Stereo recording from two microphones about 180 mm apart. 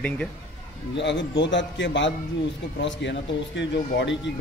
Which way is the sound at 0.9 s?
80° left.